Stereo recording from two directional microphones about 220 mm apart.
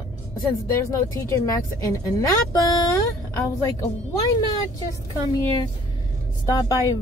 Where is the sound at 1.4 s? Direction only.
15° left (ahead or behind).